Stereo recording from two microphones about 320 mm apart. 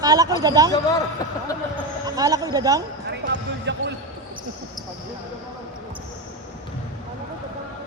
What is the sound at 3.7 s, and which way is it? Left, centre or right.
Speech, right.